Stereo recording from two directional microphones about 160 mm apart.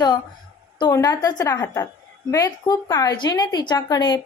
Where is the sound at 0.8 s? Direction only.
25° left (ahead or behind).